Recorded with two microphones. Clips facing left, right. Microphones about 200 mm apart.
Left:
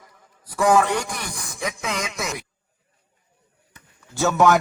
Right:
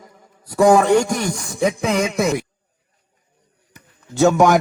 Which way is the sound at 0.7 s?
25° right (ahead or behind).